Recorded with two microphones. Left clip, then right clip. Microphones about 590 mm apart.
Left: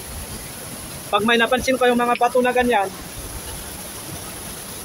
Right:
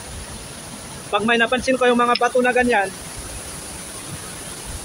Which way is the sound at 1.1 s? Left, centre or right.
Left.